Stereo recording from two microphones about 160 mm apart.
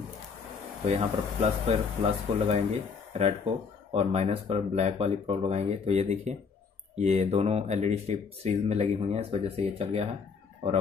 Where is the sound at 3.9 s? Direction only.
40° right (ahead or behind).